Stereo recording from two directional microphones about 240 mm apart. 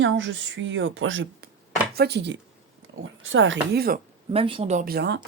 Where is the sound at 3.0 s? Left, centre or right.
Right.